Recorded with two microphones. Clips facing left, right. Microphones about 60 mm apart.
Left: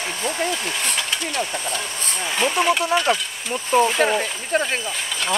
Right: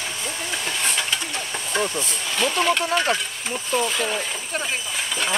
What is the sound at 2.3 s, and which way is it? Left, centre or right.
Speech, centre.